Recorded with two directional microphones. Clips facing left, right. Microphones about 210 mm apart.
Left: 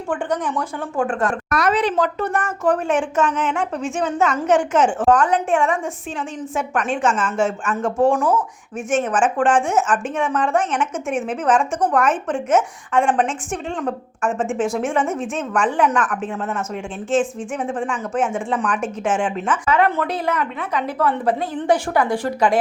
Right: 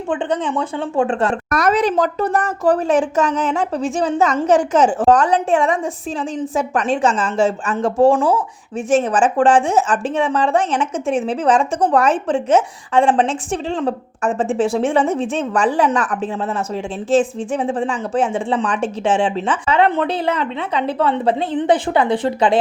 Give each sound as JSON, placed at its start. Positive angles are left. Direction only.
{"t": 0.1, "sound": "a woman's voice", "side_deg": -25}
{"t": 1.5, "sound": "a woman's voice", "side_deg": -45}